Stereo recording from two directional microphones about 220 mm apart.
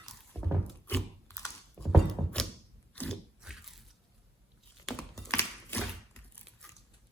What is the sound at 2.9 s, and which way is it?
Biting, 5° left (ahead or behind).